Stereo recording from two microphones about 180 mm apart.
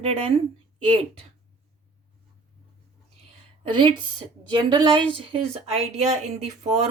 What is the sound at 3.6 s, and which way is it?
A woman's voice, 25° right (ahead or behind).